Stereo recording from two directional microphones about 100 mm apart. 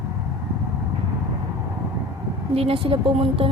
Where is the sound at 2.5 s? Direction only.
70° right (ahead or behind).